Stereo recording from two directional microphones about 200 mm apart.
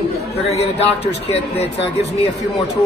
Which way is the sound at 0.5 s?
30° left (ahead or behind).